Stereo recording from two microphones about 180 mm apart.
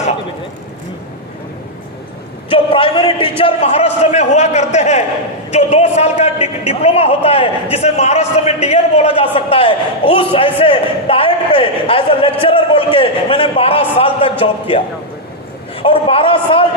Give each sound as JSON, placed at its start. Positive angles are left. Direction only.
{"t": 2.5, "sound": "a man's voice", "side_deg": 30}
{"t": 15.8, "sound": "a man's voice", "side_deg": 30}